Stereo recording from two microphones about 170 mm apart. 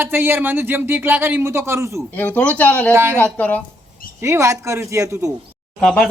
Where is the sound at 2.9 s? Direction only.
15° right (ahead or behind).